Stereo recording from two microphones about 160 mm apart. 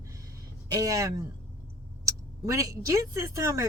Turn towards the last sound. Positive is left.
turn(degrees=-20)  # may be behind; listen again after turning